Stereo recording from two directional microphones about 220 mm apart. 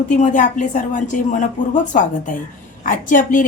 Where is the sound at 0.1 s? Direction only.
35° left (ahead or behind).